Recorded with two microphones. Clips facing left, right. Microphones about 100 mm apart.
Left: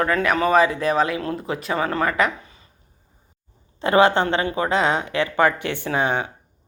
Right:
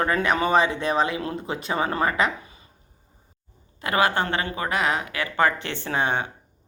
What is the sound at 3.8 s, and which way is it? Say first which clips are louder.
Speech: left 6 dB; 25° left (ahead or behind).